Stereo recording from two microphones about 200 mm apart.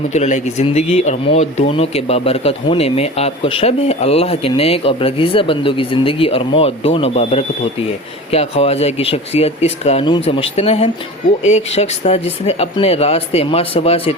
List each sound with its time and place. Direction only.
0.1 s speech: 35° left (ahead or behind)